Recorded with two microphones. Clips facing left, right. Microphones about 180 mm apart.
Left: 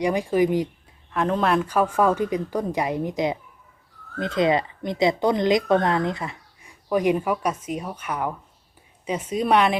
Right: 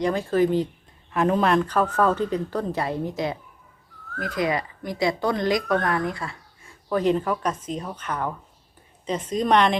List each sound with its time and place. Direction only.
0.0 s a woman's voice: 15° left (ahead or behind)
1.1 s a woman's voice: 5° right (ahead or behind)